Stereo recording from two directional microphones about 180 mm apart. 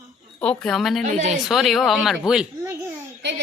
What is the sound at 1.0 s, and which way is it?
Speech, 40° right (ahead or behind).